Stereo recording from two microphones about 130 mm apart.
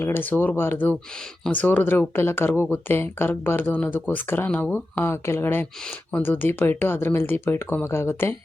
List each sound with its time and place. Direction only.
0.0 s speech: 15° left (ahead or behind)